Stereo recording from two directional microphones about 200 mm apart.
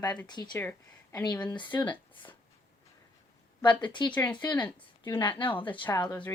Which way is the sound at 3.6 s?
25° left (ahead or behind).